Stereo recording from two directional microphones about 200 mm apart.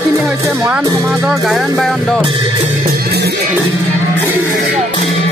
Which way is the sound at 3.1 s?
55° right (ahead or behind).